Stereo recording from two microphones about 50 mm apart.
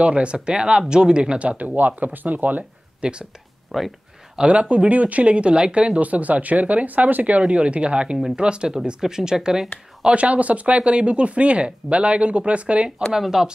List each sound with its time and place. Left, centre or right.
0.0 s speech: right
1.8 s speech: right
3.0 s speech: right
3.7 s speech: centre
4.4 s speech: right
10.0 s speech: right
13.2 s speech: centre